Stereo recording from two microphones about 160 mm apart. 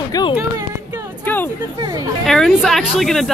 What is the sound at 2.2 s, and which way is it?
Speech, centre (ahead or behind).